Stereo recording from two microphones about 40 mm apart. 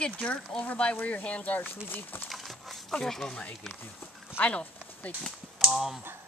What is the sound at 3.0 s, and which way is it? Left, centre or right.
Speech, centre.